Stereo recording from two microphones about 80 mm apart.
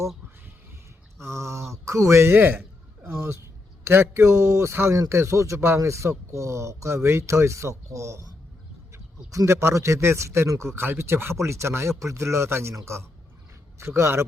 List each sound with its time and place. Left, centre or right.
1.2 s a man's voice: right
9.5 s a man's voice: right